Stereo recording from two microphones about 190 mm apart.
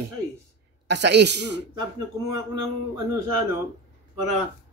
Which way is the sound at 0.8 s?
60° right (ahead or behind).